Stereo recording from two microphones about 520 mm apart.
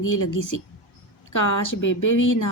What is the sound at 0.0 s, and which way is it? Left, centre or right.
A woman's voice, left.